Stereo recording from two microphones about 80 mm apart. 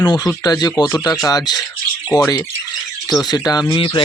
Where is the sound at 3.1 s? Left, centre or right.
Left.